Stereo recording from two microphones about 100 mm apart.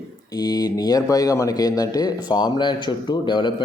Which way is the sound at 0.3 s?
40° left (ahead or behind).